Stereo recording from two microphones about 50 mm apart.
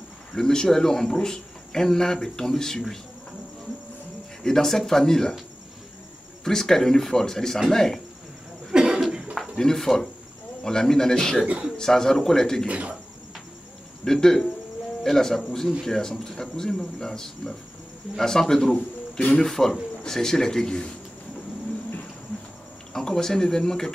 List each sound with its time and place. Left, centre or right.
0.3 s speech: centre
4.4 s speech: centre
6.4 s speech: centre
8.7 s cough: centre
9.0 s a sound: centre
9.6 s speech: centre
12.6 s speech: right
14.0 s speech: centre
22.9 s speech: centre